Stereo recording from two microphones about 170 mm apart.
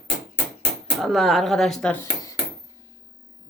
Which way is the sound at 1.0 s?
Centre (ahead or behind).